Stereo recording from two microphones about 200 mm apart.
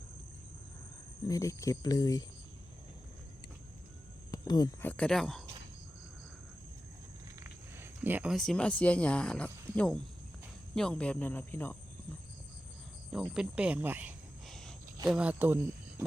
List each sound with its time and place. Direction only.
1.3 s speech: 15° left (ahead or behind)
4.3 s speech: 20° left (ahead or behind); by 5.4 s centre (ahead or behind)
7.3 s speech: 10° right (ahead or behind); by 11.8 s 10° left (ahead or behind)
13.1 s cricket: centre (ahead or behind)
14.4 s wild animals: centre (ahead or behind)
15.0 s cricket: 5° right (ahead or behind)